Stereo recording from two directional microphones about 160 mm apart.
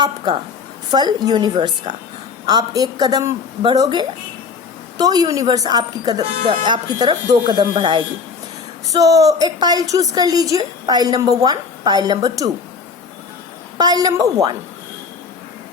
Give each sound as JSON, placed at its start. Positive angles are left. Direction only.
{"t": 0.9, "sound": "a woman's voice", "side_deg": -25}
{"t": 13.7, "sound": "a woman's voice", "side_deg": -25}